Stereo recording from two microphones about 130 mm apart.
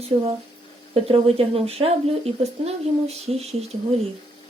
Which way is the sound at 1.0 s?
50° right (ahead or behind).